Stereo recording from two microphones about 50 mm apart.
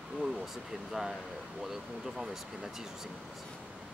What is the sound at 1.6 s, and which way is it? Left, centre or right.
Speech, centre.